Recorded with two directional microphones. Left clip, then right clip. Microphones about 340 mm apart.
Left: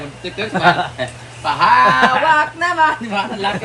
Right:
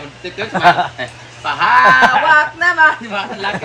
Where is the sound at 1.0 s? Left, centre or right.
Centre.